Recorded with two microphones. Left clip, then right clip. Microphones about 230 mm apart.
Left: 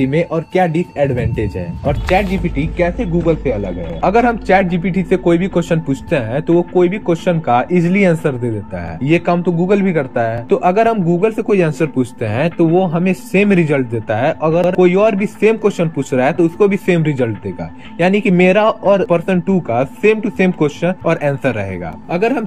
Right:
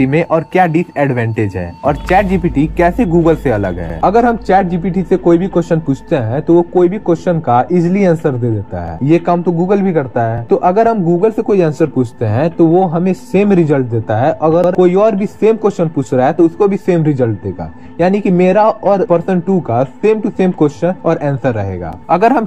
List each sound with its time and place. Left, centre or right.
0.1 s a man's voice: centre
4.0 s a man's voice: centre